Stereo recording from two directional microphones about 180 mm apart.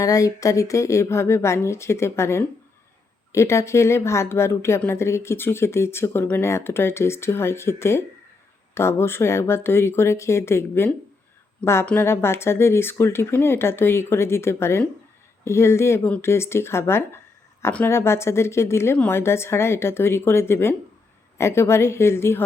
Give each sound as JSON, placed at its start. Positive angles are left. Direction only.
{"t": 0.0, "sound": "a woman's voice", "side_deg": 20}